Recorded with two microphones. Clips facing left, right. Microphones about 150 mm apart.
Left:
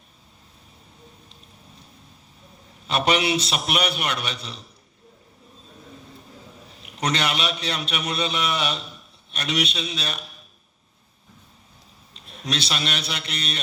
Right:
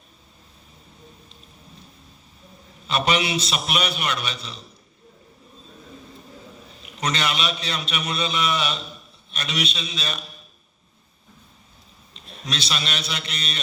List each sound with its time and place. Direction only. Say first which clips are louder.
2.8 s a man's voice: left 1 dB; 60° left (ahead or behind)
7.0 s a man's voice: left 1 dB; 60° left (ahead or behind)
12.5 s a man's voice: left 2 dB; 60° left (ahead or behind)